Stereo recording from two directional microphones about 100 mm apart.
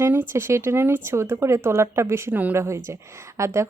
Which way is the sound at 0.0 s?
25° right (ahead or behind).